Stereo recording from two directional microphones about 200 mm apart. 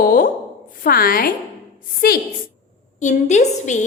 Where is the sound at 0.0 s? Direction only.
45° left (ahead or behind).